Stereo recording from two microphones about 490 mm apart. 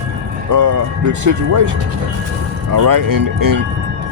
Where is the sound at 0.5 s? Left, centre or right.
Right.